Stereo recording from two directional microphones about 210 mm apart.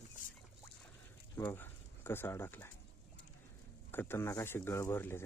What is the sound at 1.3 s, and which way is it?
Speech, 10° left (ahead or behind).